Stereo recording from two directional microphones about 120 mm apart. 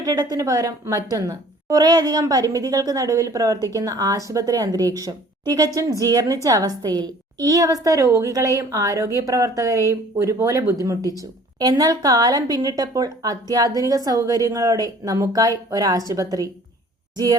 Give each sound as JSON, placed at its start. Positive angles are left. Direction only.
{"t": 0.0, "sound": "speech", "side_deg": -30}